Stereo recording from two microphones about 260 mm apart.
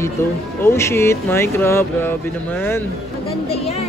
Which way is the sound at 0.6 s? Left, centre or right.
Centre.